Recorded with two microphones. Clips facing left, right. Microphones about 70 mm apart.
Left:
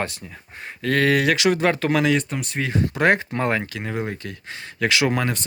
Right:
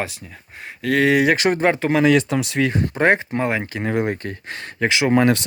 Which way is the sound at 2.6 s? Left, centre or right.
Right.